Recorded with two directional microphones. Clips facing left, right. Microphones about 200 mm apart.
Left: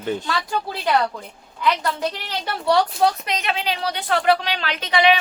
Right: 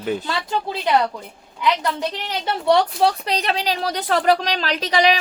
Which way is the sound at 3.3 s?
35° right (ahead or behind).